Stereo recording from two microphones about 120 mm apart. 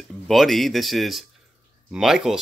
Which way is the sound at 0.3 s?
Centre (ahead or behind).